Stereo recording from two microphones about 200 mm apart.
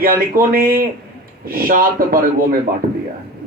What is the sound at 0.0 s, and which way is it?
A man's voice, 45° right (ahead or behind).